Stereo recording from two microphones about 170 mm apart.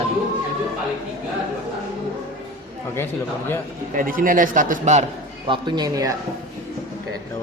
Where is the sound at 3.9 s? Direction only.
55° right (ahead or behind).